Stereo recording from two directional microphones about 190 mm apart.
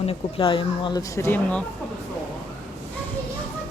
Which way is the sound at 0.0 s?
30° left (ahead or behind).